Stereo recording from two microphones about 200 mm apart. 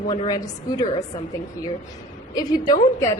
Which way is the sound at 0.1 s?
20° left (ahead or behind).